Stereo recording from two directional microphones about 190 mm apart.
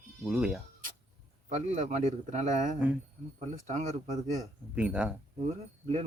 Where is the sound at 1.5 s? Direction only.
40° right (ahead or behind).